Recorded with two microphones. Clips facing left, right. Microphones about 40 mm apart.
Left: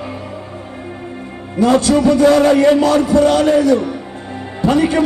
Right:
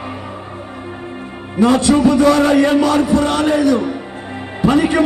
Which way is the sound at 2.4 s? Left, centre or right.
Right.